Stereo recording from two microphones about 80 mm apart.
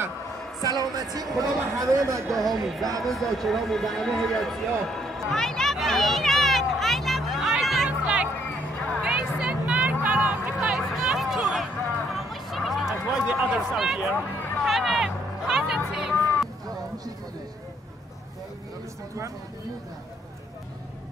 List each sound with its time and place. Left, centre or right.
0.6 s speech: right
2.5 s music: centre
3.0 s speech: centre
7.6 s music: centre
8.0 s a sound: centre
8.7 s a sound: centre
9.0 s a sound: centre
10.0 s music: centre
10.8 s a sound: centre
12.1 s music: centre
13.3 s speech: centre
14.6 s music: centre